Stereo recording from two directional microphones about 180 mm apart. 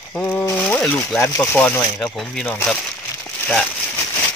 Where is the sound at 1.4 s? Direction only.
10° left (ahead or behind).